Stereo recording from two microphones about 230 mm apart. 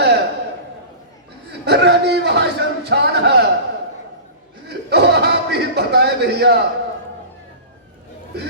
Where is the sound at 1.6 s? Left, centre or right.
Right.